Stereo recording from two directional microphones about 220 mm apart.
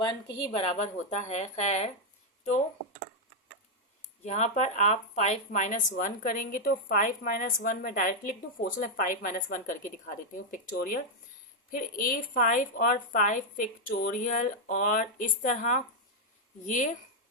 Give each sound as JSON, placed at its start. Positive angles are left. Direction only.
{"t": 0.0, "sound": "speech", "side_deg": 20}
{"t": 4.2, "sound": "speech", "side_deg": 30}